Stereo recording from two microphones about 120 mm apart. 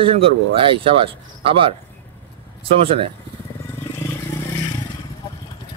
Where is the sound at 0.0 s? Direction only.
50° right (ahead or behind).